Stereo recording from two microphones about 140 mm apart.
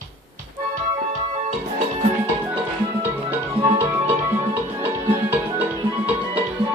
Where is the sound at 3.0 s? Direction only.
15° right (ahead or behind).